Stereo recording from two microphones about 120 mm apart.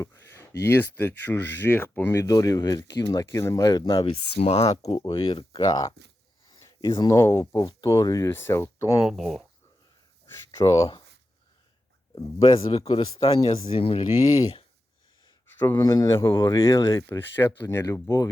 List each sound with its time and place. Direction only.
0.0 s speech: 25° left (ahead or behind); by 4.7 s 60° left (ahead or behind)
4.8 s speech: 50° left (ahead or behind)
5.5 s speech: 35° left (ahead or behind)
6.5 s a sound: 30° left (ahead or behind)
6.9 s speech: 35° left (ahead or behind)
9.1 s speech: centre (ahead or behind)
10.2 s a sound: 25° left (ahead or behind)
12.4 s speech: 55° left (ahead or behind)
12.9 s speech: 40° left (ahead or behind)
15.4 s a sound: 20° left (ahead or behind)
15.8 s speech: 30° left (ahead or behind)